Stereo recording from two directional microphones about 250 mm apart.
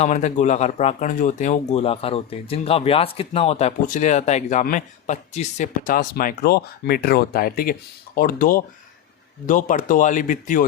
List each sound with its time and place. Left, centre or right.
0.0 s speech: left